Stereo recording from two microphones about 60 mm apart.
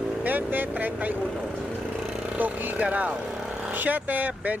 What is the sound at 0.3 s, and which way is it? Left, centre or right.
Speech, right.